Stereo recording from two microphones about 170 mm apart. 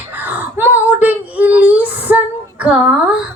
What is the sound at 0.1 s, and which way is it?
Child singing, 10° right (ahead or behind).